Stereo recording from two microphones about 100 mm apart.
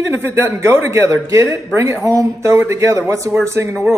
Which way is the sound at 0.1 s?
25° right (ahead or behind).